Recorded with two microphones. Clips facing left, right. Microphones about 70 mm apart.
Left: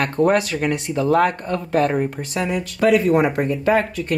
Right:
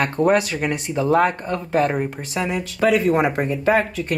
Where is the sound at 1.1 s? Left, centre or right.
Centre.